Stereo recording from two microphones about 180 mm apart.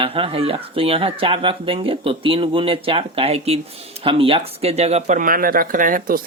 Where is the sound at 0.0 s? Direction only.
30° right (ahead or behind).